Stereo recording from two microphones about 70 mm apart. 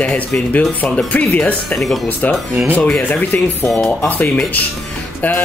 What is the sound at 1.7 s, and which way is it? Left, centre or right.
Speech, centre.